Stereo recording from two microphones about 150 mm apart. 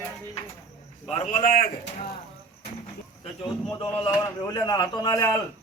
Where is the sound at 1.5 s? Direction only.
85° left.